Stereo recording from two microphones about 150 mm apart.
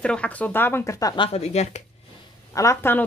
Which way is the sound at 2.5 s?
20° left (ahead or behind).